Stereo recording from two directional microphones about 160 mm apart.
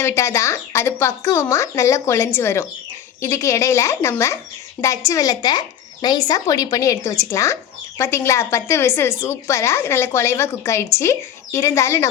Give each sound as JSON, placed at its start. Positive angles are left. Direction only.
{"t": 0.0, "sound": "speech", "side_deg": 15}